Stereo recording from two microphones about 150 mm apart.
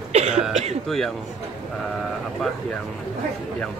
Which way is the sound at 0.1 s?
45° right (ahead or behind).